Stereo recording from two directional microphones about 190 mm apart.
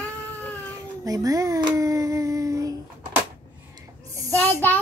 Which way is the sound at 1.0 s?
20° right (ahead or behind).